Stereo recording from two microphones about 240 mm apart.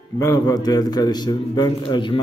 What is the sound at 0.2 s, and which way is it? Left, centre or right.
A man's voice, centre.